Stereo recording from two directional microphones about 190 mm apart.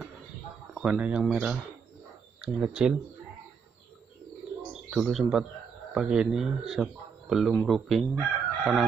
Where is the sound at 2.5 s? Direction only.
5° right (ahead or behind).